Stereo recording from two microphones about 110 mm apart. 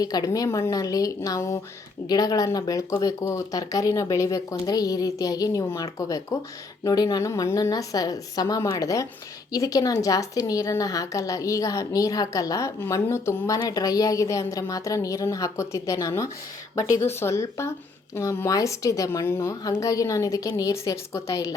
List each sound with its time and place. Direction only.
0.0 s speech: 35° left (ahead or behind)